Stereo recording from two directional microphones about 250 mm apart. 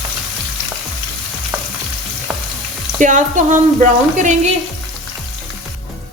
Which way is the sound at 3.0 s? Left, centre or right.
Right.